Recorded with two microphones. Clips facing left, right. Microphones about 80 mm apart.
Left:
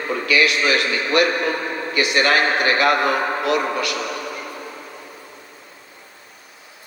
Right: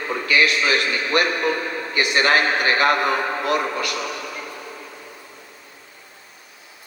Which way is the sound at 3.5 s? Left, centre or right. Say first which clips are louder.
Left 1 dB; right.